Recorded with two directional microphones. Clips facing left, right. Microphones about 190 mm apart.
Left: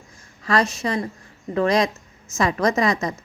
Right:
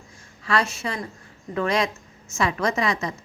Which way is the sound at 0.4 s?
40° left (ahead or behind).